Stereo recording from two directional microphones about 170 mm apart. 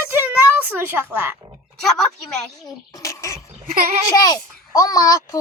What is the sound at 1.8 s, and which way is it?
Speech, centre (ahead or behind).